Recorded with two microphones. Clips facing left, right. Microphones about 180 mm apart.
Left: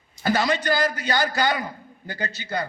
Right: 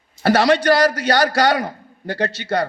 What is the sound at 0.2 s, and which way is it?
A man's voice, 75° right (ahead or behind).